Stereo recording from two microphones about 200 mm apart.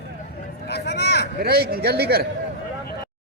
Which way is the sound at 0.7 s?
55° left (ahead or behind).